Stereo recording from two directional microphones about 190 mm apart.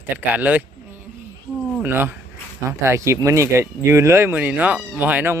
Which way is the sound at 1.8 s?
10° right (ahead or behind).